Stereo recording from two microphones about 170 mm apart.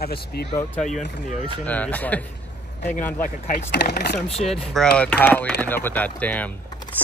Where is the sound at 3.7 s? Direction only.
70° left (ahead or behind).